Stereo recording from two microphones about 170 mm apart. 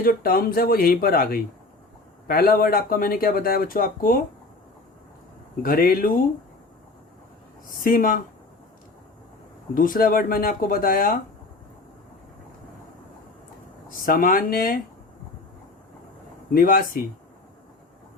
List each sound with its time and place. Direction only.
0.0 s speech: 60° left (ahead or behind)
5.6 s speech: 60° left (ahead or behind)
7.8 s speech: 55° left (ahead or behind)
9.7 s speech: 55° left (ahead or behind)
13.9 s speech: 55° left (ahead or behind)
16.6 s speech: 55° left (ahead or behind)